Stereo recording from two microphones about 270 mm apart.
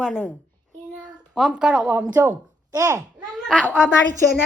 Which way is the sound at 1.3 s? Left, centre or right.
Centre.